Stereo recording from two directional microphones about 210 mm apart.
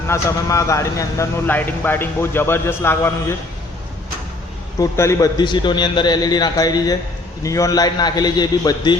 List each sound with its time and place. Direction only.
0.1 s a man's voice: 15° left (ahead or behind)
4.8 s a man's voice: 15° left (ahead or behind)